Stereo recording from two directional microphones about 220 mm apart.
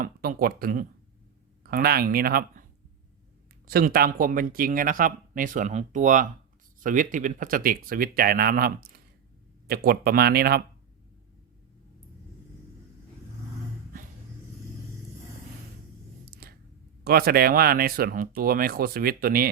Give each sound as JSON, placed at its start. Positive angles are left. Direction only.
{"t": 0.0, "sound": "speech", "side_deg": -40}
{"t": 3.7, "sound": "speech", "side_deg": -45}
{"t": 16.3, "sound": "clicking", "side_deg": -45}
{"t": 17.0, "sound": "speech", "side_deg": -45}